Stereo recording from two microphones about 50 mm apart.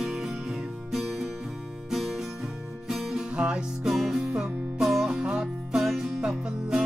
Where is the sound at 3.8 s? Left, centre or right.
Centre.